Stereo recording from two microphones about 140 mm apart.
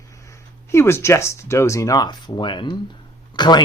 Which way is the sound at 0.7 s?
20° left (ahead or behind).